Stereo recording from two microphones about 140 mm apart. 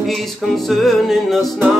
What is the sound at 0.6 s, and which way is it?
Music, centre (ahead or behind).